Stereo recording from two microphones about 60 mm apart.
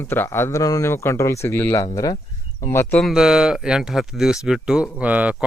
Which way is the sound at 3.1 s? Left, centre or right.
Centre.